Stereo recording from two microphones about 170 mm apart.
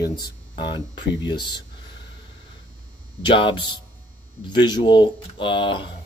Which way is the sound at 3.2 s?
30° left (ahead or behind).